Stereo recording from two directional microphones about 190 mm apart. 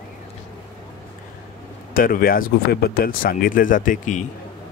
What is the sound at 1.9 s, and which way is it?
Speech, 50° left (ahead or behind).